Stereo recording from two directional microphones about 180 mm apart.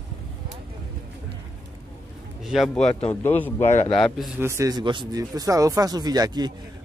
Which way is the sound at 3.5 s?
40° left (ahead or behind).